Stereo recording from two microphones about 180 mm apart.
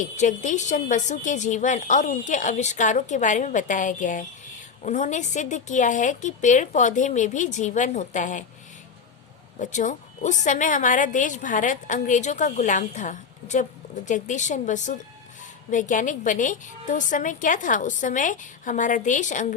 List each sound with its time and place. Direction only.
0.0 s a woman's voice: 45° left (ahead or behind)
9.6 s a woman's voice: 45° left (ahead or behind)